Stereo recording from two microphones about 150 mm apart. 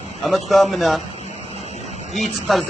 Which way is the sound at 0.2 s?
Centre (ahead or behind).